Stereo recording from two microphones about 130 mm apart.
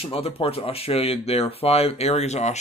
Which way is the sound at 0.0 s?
50° left (ahead or behind).